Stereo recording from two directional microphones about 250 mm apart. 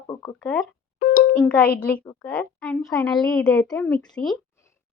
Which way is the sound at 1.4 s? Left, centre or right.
Centre.